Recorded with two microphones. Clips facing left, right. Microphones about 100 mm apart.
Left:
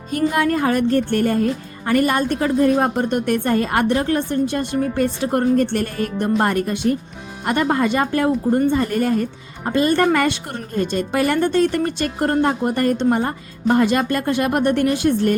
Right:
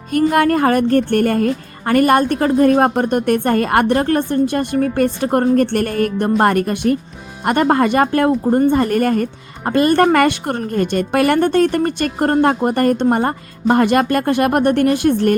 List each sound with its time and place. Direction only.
0.1 s speech: 55° right (ahead or behind)
8.3 s a woman's voice: 45° right (ahead or behind)